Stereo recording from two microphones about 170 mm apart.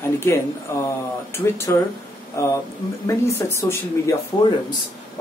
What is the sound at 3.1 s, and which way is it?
Speech, 15° left (ahead or behind).